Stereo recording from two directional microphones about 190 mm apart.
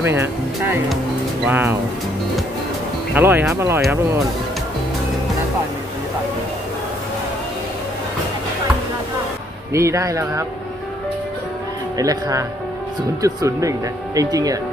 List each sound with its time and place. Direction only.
0.0 s speech: 10° right (ahead or behind)
3.2 s speech: 10° right (ahead or behind)
9.7 s speech: 15° right (ahead or behind)
12.0 s speech: 20° right (ahead or behind)